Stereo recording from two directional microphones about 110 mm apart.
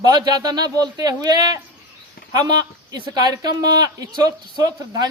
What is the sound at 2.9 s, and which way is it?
Speech, 35° right (ahead or behind).